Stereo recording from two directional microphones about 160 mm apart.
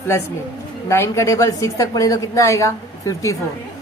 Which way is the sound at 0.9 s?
15° left (ahead or behind).